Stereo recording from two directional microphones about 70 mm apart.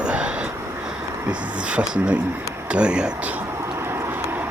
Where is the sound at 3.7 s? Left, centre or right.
Right.